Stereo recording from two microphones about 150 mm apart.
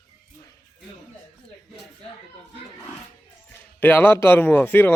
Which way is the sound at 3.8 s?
15° left (ahead or behind).